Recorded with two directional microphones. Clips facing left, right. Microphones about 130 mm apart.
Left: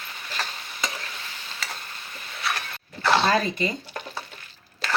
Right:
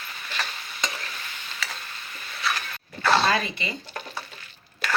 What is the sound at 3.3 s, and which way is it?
Speech, 40° left (ahead or behind).